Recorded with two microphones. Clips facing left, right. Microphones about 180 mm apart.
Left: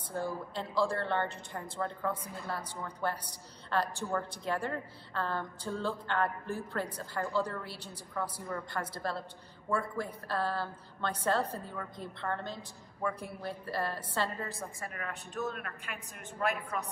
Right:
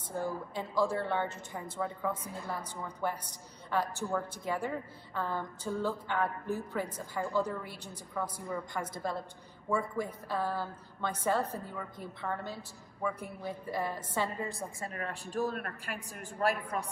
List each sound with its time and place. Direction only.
0.1 s a woman's voice: 15° right (ahead or behind)
14.9 s a woman's voice: 35° right (ahead or behind)